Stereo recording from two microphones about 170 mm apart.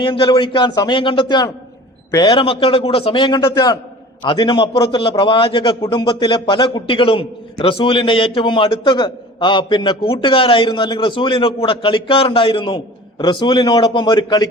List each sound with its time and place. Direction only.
0.0 s a man's voice: 30° left (ahead or behind)